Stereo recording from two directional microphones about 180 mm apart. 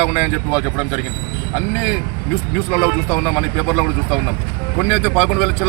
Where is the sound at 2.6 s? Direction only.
Centre (ahead or behind).